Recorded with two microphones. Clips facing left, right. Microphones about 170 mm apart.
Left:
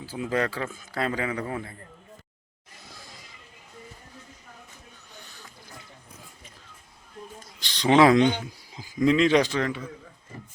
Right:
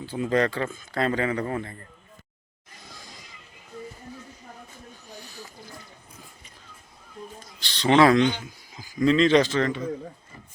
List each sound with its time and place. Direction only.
0.0 s speech: 5° left (ahead or behind)
7.6 s speech: 15° left (ahead or behind)
8.4 s speech: 25° left (ahead or behind)
9.0 s a man's voice: 10° left (ahead or behind)